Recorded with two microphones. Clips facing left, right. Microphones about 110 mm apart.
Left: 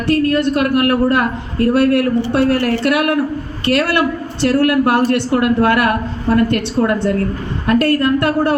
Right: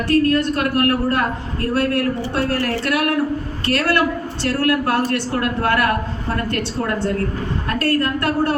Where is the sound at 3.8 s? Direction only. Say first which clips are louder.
Even; 20° left (ahead or behind).